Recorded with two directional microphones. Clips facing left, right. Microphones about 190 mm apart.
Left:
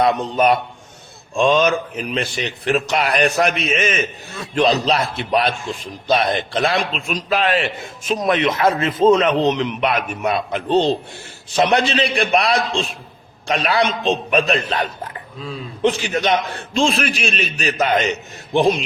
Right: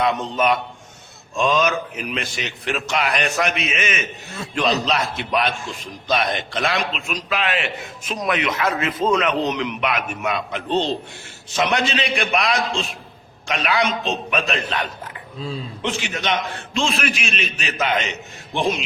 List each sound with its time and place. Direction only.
0.0 s a man's voice: 40° left (ahead or behind)